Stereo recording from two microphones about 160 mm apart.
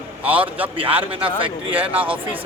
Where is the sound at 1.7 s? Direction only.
10° right (ahead or behind).